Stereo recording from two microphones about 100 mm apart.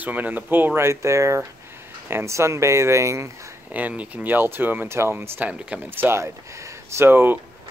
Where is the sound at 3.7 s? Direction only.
15° right (ahead or behind).